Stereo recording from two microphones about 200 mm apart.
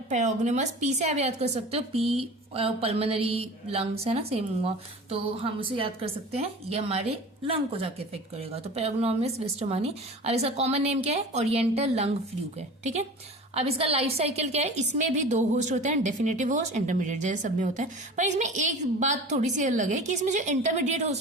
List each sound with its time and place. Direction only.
0.1 s a woman's voice: 35° right (ahead or behind)